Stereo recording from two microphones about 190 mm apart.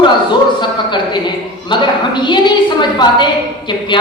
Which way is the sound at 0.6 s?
25° left (ahead or behind).